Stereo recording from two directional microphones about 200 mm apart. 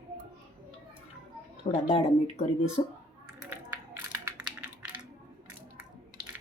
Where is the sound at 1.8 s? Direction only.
30° left (ahead or behind).